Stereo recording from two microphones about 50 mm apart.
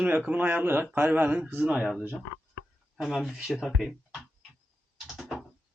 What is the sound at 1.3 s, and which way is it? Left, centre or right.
Speech, right.